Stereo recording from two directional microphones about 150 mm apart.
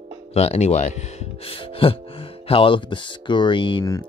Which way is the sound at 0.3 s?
45° left (ahead or behind).